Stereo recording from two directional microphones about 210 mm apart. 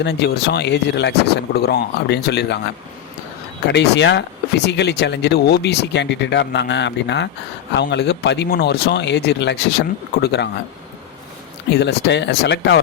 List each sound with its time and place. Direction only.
0.0 s speech: 50° left (ahead or behind)
3.7 s speech: 55° left (ahead or behind)
11.7 s speech: 55° left (ahead or behind)